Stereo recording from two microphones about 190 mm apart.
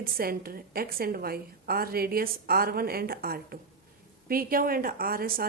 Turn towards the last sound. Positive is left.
turn(degrees=-50)  # may be behind; listen again after turning